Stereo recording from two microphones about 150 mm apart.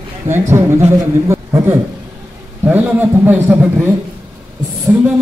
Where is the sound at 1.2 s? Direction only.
20° right (ahead or behind).